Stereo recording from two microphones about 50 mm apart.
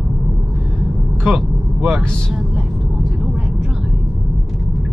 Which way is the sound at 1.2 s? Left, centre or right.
Centre.